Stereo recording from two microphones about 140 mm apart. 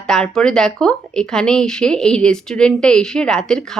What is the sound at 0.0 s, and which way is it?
A woman's voice, 5° left (ahead or behind).